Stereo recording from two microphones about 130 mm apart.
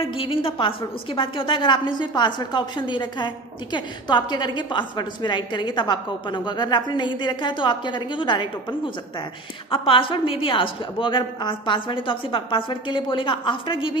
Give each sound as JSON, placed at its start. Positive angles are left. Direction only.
{"t": 0.0, "sound": "a woman's voice", "side_deg": 45}